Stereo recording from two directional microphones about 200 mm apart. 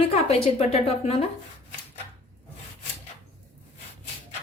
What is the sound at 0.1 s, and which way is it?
A woman's voice, 30° left (ahead or behind).